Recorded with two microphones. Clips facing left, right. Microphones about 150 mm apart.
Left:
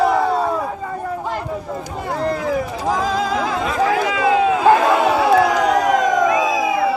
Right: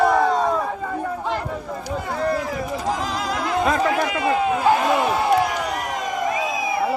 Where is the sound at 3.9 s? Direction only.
90° left.